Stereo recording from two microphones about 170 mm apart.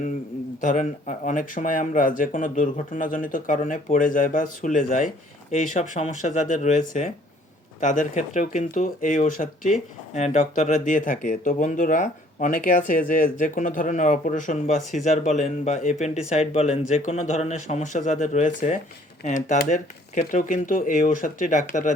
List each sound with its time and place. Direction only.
0.6 s speech: 50° left (ahead or behind)